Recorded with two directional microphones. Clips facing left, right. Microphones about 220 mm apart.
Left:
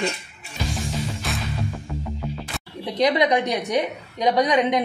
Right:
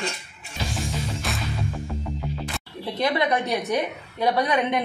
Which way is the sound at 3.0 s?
15° left (ahead or behind).